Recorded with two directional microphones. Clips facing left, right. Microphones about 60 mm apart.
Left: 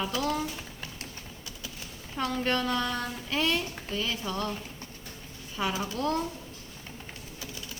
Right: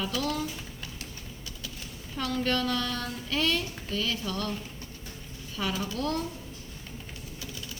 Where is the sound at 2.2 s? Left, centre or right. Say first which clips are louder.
Even; left.